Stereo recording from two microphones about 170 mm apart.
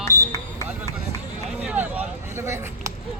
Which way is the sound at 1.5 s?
10° right (ahead or behind).